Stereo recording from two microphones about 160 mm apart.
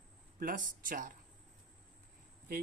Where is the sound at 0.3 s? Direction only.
60° right (ahead or behind).